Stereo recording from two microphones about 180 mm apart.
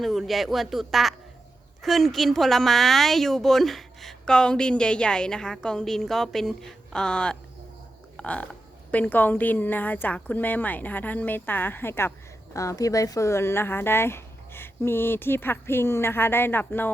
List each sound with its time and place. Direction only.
0.0 s speech: centre (ahead or behind)
8.1 s a sound: 5° left (ahead or behind)
8.9 s speech: 10° left (ahead or behind)